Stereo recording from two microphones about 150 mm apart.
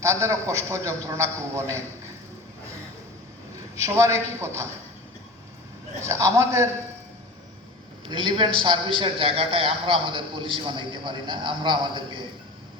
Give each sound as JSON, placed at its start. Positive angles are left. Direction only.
{"t": 0.0, "sound": "a man's voice", "side_deg": -20}
{"t": 3.8, "sound": "a man's voice", "side_deg": -20}
{"t": 6.1, "sound": "a man's voice", "side_deg": -20}
{"t": 8.0, "sound": "a man's voice", "side_deg": -30}